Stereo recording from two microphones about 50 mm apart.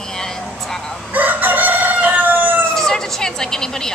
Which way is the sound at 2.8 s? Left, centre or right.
Centre.